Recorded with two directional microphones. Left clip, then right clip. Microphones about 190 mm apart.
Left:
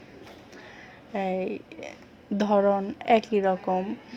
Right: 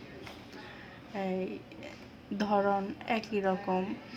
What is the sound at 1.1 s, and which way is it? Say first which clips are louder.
A woman's voice: left 7 dB; 30° left (ahead or behind).